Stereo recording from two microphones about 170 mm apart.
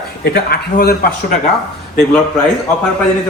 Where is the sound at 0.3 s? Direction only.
65° left (ahead or behind).